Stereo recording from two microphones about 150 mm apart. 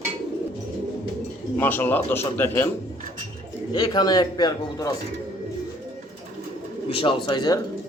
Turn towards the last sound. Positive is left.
turn(degrees=30)  # may be behind; listen again after turning